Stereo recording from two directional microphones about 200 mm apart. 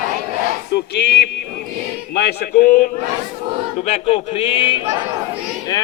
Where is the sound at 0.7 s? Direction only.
55° left (ahead or behind).